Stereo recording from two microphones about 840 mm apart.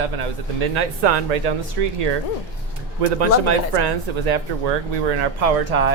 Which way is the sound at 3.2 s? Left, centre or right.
Right.